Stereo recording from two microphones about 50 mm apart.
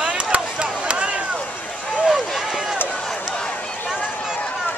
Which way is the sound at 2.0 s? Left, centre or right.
Centre.